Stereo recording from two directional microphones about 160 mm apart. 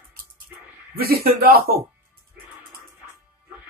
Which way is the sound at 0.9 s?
70° right (ahead or behind).